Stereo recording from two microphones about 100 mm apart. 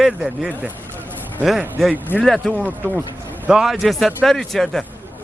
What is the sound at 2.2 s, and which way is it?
Speech, centre (ahead or behind).